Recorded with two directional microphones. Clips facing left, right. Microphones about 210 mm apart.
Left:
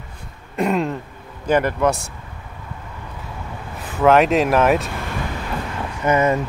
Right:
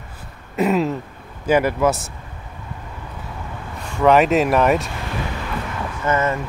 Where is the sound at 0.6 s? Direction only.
5° right (ahead or behind).